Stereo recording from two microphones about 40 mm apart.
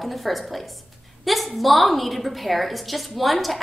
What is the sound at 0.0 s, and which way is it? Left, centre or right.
A woman's voice, centre.